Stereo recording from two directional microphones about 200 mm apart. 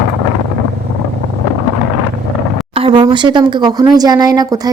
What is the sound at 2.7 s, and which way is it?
Speech, 25° right (ahead or behind).